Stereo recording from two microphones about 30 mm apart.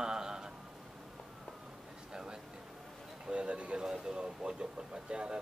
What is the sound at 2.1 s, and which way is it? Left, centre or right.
Speech, right.